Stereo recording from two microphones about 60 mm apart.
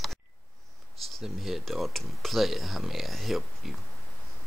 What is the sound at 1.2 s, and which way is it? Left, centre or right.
Speech, centre.